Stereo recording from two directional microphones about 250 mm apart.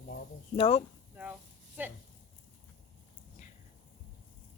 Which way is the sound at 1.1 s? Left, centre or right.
Centre.